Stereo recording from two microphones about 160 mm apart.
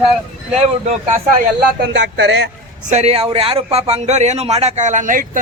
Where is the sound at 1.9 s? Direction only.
90° right.